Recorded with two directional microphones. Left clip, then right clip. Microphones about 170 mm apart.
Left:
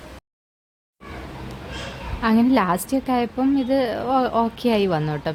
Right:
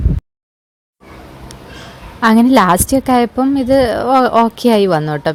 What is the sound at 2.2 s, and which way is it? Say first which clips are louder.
A woman's voice: right 9 dB; 50° right (ahead or behind).